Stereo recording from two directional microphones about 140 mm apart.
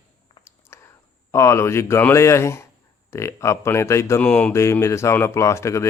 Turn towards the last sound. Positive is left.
turn(degrees=20)  # may be behind; listen again after turning